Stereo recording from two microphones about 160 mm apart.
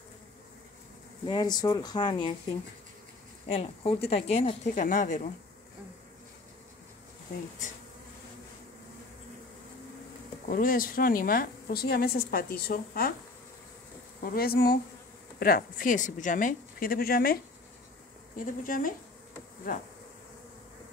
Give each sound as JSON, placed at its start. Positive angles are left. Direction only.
{"t": 1.2, "sound": "speech", "side_deg": 25}
{"t": 3.4, "sound": "speech", "side_deg": 40}
{"t": 10.5, "sound": "a woman's voice", "side_deg": 60}
{"t": 14.2, "sound": "a woman's voice", "side_deg": 70}